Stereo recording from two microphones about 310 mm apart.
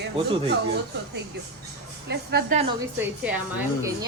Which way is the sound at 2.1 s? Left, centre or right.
Right.